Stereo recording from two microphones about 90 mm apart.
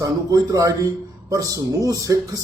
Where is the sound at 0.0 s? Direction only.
40° right (ahead or behind).